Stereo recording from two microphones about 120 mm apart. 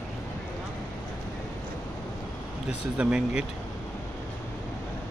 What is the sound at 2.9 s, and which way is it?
Speech, 10° right (ahead or behind).